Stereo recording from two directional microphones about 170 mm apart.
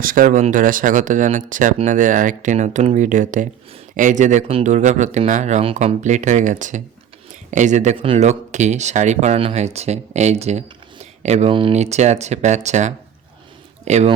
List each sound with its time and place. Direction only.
0.0 s speech: 55° right (ahead or behind)
7.9 s speech: 30° right (ahead or behind)